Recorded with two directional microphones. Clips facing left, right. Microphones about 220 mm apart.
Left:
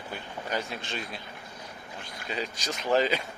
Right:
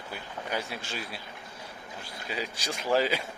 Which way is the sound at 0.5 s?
10° right (ahead or behind).